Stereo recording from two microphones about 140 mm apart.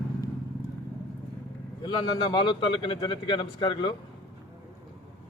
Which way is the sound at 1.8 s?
35° left (ahead or behind).